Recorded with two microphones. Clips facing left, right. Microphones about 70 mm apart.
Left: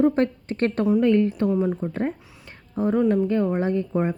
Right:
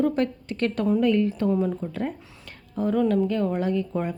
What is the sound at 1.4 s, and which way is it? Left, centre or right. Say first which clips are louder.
A woman's voice: left 1 dB; centre.